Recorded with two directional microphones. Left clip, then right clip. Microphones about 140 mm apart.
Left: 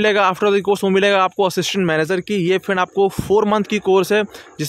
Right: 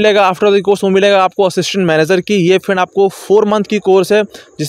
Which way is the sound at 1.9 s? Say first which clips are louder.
Right 7 dB; 45° right (ahead or behind).